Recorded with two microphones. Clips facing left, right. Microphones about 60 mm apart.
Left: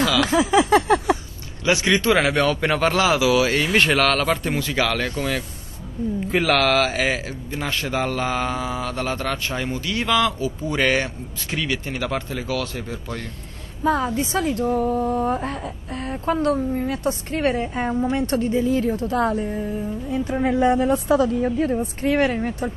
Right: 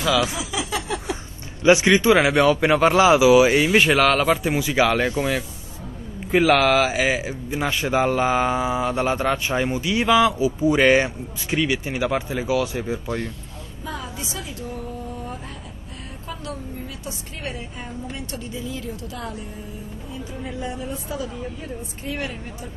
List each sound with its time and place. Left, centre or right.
0.3 s a sound: left
1.6 s speech: centre
2.0 s speech: centre
6.2 s speech: centre
13.8 s a woman's voice: left
18.2 s a woman's voice: left
20.1 s a woman's voice: left